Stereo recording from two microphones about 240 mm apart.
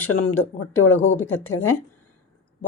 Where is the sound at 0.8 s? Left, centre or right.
Left.